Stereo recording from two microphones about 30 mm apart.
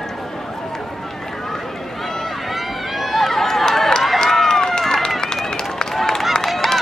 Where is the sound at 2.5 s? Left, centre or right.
Centre.